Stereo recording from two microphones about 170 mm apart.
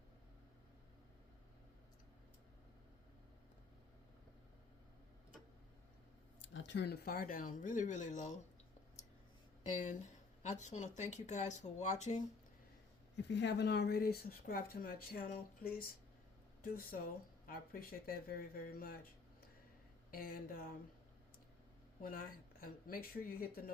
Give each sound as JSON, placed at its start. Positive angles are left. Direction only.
{"t": 6.4, "sound": "speech", "side_deg": 90}
{"t": 9.6, "sound": "speech", "side_deg": 45}
{"t": 13.1, "sound": "speech", "side_deg": 90}
{"t": 20.1, "sound": "speech", "side_deg": 60}
{"t": 22.0, "sound": "speech", "side_deg": 55}